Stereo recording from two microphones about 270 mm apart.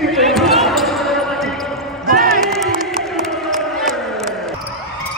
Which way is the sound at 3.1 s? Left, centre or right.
Centre.